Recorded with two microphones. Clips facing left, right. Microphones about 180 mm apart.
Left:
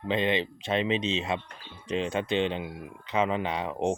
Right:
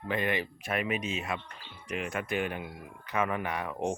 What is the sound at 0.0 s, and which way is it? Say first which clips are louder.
Speech: left 4 dB; 20° left (ahead or behind).